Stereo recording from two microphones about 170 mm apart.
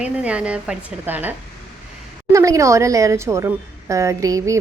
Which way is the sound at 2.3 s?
20° right (ahead or behind).